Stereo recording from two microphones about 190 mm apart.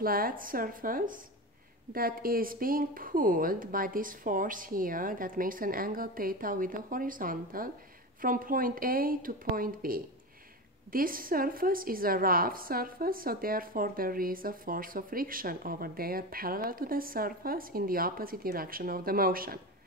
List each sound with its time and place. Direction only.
0.0 s a woman's voice: 50° right (ahead or behind)